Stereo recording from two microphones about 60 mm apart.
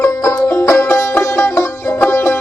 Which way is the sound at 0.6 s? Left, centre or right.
Left.